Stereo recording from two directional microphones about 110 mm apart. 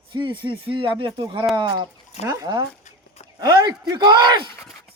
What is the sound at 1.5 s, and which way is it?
Speech, 40° right (ahead or behind).